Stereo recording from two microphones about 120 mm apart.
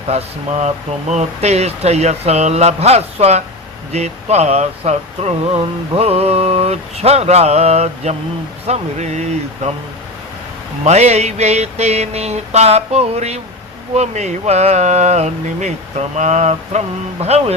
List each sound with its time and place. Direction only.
0.1 s speech: 65° right (ahead or behind)
10.8 s speech: 65° right (ahead or behind)